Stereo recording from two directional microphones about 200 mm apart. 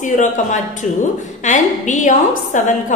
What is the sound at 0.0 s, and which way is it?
A woman's voice, 40° left (ahead or behind).